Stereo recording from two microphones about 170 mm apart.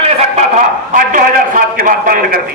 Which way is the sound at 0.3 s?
45° right (ahead or behind).